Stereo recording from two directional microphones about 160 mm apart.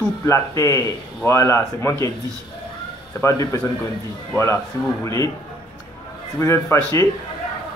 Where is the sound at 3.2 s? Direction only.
15° left (ahead or behind).